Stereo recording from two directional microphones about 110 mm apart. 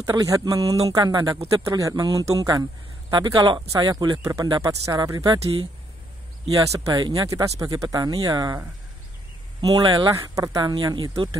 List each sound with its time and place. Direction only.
0.0 s speech: 30° right (ahead or behind)
6.5 s speech: 30° right (ahead or behind)
9.6 s speech: 40° right (ahead or behind)